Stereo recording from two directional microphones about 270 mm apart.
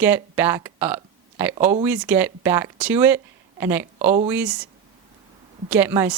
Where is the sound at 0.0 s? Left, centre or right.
Centre.